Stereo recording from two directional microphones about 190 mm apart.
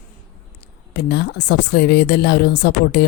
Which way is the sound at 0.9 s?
60° left (ahead or behind).